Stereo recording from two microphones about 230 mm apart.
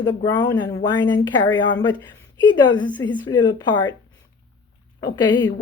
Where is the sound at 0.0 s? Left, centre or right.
Centre.